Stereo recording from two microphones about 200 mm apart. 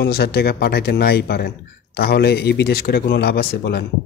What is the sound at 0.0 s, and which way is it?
Speech, 50° left (ahead or behind).